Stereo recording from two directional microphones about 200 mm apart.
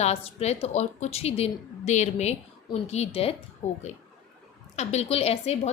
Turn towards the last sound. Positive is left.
turn(degrees=30)  # may be behind; listen again after turning